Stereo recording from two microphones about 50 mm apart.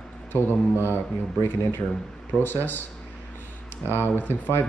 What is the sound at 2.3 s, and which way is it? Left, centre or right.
Speech, centre.